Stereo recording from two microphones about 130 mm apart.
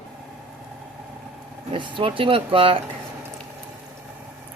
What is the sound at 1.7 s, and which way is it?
Speech, 40° right (ahead or behind).